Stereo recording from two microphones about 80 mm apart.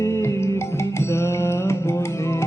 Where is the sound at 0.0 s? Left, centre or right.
Left.